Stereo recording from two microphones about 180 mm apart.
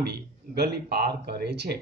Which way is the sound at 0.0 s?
65° right (ahead or behind).